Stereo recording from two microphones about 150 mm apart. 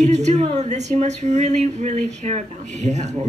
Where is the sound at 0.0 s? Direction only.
50° right (ahead or behind).